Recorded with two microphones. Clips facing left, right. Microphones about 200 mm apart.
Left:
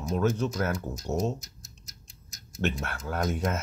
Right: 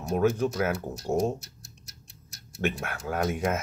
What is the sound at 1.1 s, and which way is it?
Speech, 35° right (ahead or behind).